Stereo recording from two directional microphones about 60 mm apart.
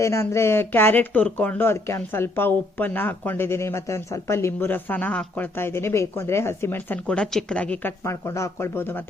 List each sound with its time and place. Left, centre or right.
0.0 s speech: left
1.7 s speech: left
4.7 s speech: left
5.5 s speech: left
7.1 s a woman's voice: centre
7.5 s speech: left
8.0 s speech: left